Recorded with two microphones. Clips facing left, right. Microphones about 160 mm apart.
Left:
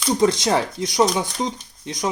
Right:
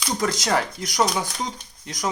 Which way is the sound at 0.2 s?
25° left (ahead or behind).